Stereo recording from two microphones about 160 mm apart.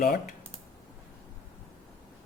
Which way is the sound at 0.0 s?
65° left (ahead or behind).